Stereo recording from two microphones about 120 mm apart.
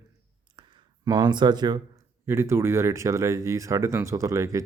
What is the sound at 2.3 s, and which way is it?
Speech, 20° right (ahead or behind).